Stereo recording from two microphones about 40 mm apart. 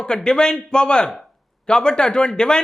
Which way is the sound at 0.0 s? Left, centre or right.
Left.